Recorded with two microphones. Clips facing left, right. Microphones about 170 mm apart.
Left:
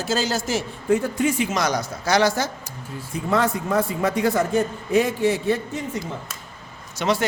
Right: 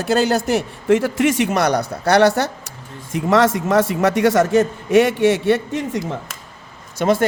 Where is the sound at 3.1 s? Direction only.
85° right.